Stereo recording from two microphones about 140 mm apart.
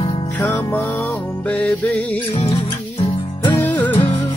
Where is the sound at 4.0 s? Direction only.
35° left (ahead or behind).